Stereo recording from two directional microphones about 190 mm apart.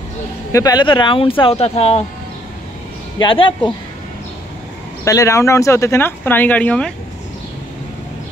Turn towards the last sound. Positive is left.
turn(degrees=5)  # may be behind; listen again after turning